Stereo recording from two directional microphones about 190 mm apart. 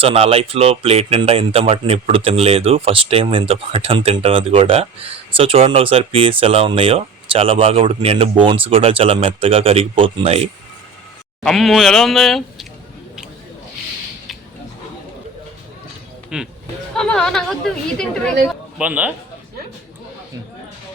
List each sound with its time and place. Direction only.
0.0 s speech: 30° right (ahead or behind)
11.4 s speech: centre (ahead or behind)
16.3 s speech: 5° right (ahead or behind)
18.4 s speech: 5° right (ahead or behind)